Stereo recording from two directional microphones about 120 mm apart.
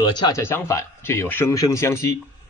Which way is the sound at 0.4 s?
20° left (ahead or behind).